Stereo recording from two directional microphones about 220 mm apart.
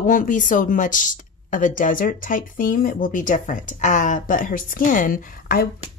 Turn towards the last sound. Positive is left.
turn(degrees=40)  # may be behind; listen again after turning